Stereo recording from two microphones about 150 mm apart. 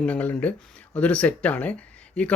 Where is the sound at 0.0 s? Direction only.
10° left (ahead or behind).